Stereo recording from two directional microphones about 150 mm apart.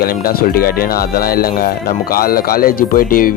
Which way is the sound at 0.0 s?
80° left.